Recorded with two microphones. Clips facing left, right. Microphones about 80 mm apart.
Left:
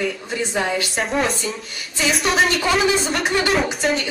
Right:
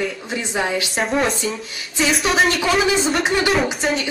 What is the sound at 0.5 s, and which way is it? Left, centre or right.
Speech, centre.